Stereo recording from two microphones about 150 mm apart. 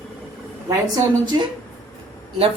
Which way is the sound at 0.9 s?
30° right (ahead or behind).